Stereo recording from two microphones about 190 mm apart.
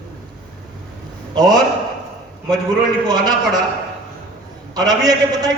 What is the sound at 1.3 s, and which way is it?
Speech, 20° right (ahead or behind).